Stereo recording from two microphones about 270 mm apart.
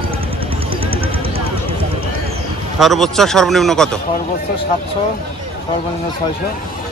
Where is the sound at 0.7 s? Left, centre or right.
Centre.